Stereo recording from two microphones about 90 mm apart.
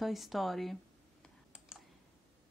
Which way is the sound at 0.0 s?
Centre (ahead or behind).